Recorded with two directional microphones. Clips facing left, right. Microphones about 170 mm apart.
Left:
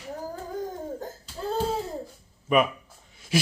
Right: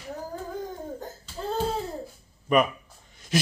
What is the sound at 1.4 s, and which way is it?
Laughter, 5° left (ahead or behind).